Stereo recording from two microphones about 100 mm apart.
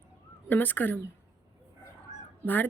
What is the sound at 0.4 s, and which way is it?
Speech, 20° left (ahead or behind).